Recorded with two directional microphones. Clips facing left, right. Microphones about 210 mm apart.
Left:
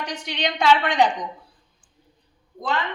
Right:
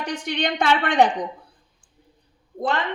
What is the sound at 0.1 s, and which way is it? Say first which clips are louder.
A woman's voice: right 6 dB; 55° right (ahead or behind).